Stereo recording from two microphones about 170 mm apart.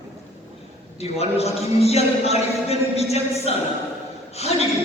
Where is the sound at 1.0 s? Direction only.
40° left (ahead or behind).